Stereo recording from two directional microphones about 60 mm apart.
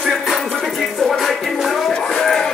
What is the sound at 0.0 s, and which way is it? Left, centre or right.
Music, centre.